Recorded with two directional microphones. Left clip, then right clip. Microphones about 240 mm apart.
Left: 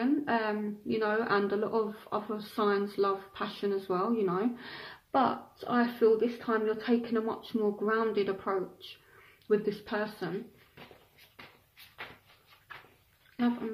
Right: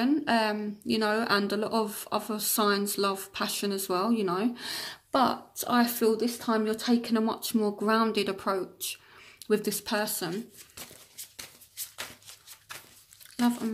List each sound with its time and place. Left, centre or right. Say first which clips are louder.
0.0 s a woman's voice: right 4 dB; right